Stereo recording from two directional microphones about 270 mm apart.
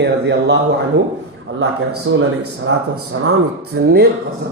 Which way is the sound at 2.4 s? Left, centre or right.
Right.